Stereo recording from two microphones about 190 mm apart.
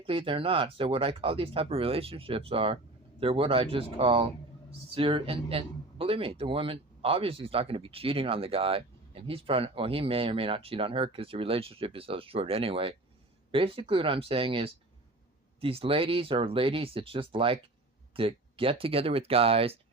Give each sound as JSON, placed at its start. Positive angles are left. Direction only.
{"t": 0.0, "sound": "speech", "side_deg": -30}